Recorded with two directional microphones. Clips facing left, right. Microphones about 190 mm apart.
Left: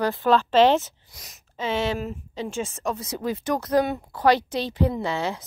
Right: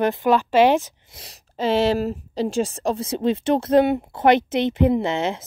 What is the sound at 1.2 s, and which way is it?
Speech, 35° right (ahead or behind).